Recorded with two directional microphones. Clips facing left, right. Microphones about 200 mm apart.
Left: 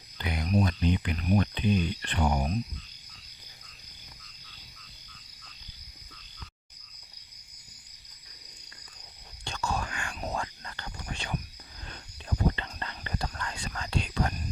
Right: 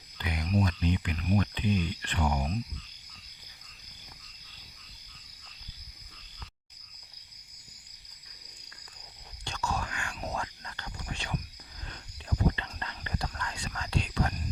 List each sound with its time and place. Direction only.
0.2 s a sound: 35° left (ahead or behind)
0.5 s speech: 30° left (ahead or behind)
9.4 s whispering: 30° left (ahead or behind)
12.5 s whispering: 30° left (ahead or behind)